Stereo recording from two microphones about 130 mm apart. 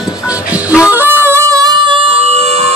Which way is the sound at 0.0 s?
10° right (ahead or behind).